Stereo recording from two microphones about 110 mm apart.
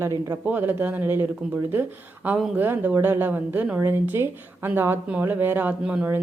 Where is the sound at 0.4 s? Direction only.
15° right (ahead or behind).